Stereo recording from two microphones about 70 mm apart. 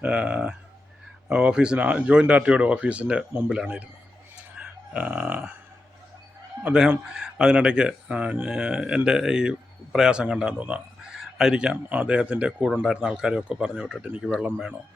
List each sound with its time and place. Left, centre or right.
0.0 s speech: centre
4.5 s a sound: centre
6.6 s speech: centre
11.2 s fowl: centre
11.7 s speech: right